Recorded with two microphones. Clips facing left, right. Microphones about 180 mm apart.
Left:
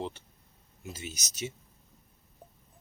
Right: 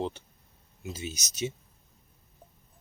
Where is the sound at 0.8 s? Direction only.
20° right (ahead or behind).